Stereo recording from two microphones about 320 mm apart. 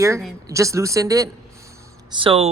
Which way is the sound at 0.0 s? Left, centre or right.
Centre.